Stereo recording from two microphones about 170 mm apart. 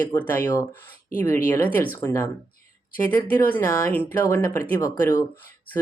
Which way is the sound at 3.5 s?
10° left (ahead or behind).